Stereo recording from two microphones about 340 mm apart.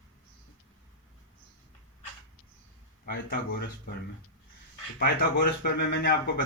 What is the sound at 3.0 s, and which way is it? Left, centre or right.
Speech, left.